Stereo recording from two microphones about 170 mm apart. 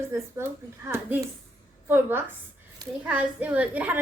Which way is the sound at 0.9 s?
15° right (ahead or behind).